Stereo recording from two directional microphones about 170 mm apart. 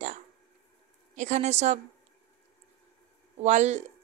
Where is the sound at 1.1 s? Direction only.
45° right (ahead or behind).